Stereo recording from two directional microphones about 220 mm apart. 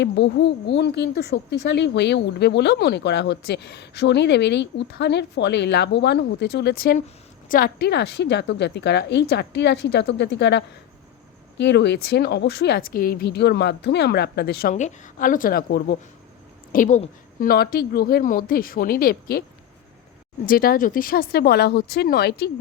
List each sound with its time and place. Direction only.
0.0 s a woman's voice: 55° left (ahead or behind)